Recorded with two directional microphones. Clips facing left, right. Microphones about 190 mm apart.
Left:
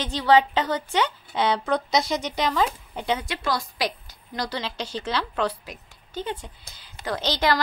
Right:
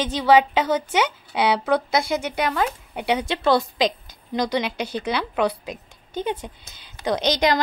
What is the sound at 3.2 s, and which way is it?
A woman's voice, 25° right (ahead or behind).